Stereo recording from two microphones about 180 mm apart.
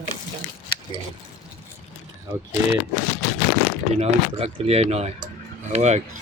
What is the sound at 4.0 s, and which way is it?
Speech, 35° right (ahead or behind).